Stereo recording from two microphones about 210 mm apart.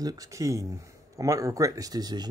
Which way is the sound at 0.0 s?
15° right (ahead or behind).